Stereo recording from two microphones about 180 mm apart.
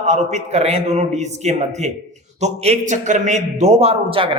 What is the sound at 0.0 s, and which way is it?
A man's voice, 40° right (ahead or behind).